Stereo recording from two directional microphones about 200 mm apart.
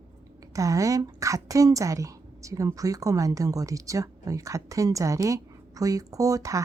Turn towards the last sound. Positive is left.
turn(degrees=-15)  # may be behind; listen again after turning